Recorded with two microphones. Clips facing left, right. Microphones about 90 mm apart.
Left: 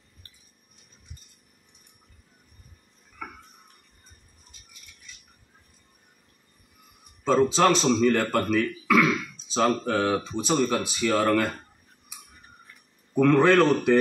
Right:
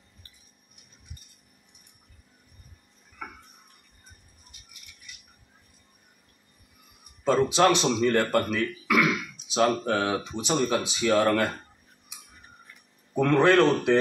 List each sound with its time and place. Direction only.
7.2 s speech: 15° right (ahead or behind)
13.1 s a man's voice: 20° right (ahead or behind)